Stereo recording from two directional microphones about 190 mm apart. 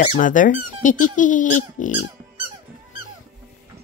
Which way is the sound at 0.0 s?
45° left (ahead or behind).